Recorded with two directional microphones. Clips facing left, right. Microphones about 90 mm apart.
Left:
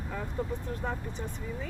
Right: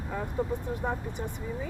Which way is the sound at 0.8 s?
15° right (ahead or behind).